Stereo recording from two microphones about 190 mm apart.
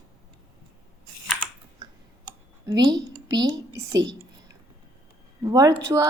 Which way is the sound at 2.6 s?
20° right (ahead or behind).